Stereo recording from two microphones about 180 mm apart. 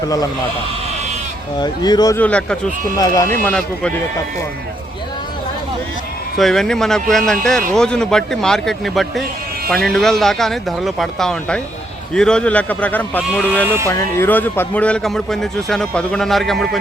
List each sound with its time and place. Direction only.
1.5 s speech: 25° left (ahead or behind)
2.1 s a man's voice: 5° left (ahead or behind)
6.3 s a man's voice: centre (ahead or behind)